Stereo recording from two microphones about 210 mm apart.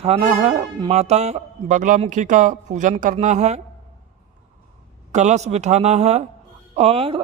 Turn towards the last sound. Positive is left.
turn(degrees=-30)  # may be behind; listen again after turning